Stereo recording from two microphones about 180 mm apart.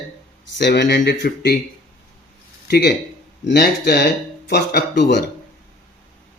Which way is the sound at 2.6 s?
65° left (ahead or behind).